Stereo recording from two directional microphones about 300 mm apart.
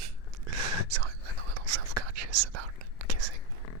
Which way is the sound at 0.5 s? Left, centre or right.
Right.